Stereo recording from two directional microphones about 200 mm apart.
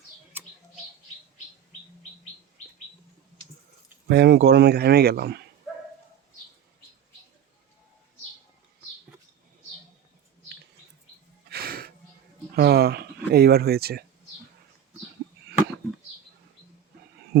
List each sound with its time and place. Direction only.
4.1 s speech: 60° right (ahead or behind)
11.4 s music: 50° right (ahead or behind)
12.5 s speech: 55° right (ahead or behind)